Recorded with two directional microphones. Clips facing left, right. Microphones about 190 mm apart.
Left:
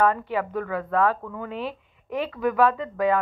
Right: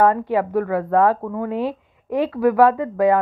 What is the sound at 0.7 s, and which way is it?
Speech, 35° right (ahead or behind).